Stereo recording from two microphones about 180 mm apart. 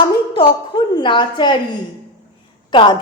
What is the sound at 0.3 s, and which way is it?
A woman's voice, 25° left (ahead or behind).